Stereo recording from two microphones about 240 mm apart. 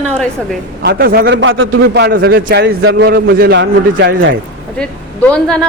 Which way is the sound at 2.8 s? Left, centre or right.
Right.